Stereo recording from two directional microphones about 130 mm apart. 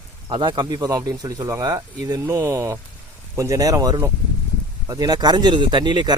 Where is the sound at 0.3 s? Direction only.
35° right (ahead or behind).